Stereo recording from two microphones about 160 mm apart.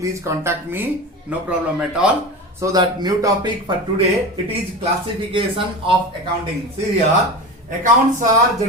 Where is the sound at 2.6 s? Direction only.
25° right (ahead or behind).